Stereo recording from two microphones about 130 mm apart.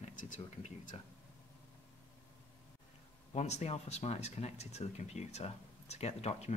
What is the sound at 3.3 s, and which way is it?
Speech, 60° left (ahead or behind).